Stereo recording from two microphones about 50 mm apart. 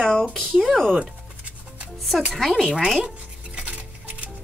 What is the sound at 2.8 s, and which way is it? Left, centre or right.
Speech, centre.